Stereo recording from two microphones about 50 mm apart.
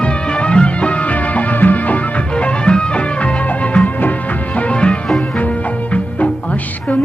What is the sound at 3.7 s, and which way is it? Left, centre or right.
Music, left.